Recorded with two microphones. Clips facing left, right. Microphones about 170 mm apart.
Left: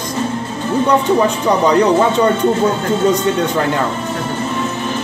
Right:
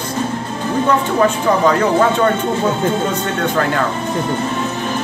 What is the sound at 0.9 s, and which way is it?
Speech, 15° left (ahead or behind).